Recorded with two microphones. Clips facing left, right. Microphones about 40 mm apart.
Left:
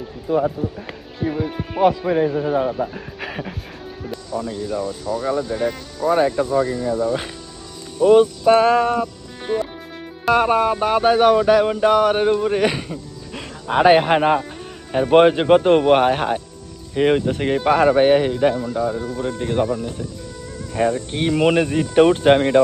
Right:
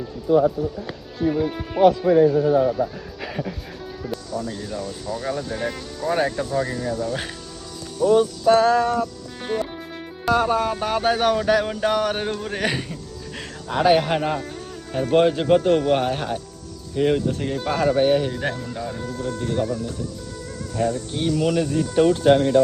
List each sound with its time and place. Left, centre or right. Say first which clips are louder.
1.2 s speech: right 1 dB; centre
2.0 s speech: right 3 dB; left
3.2 s music: even; left
4.4 s a sound: left 5 dB; centre
4.9 s speech: left 5 dB; centre
8.0 s speech: left 4 dB; left
9.4 s speech: left 3 dB; centre
10.2 s a sound: left 4 dB; left
12.5 s speech: left 5 dB; centre
13.7 s speech: left 4 dB; left
18.7 s a sound: left 8 dB; centre
18.9 s speech: left 4 dB; left